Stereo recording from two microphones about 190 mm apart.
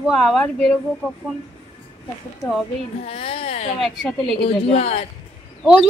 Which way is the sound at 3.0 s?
30° left (ahead or behind).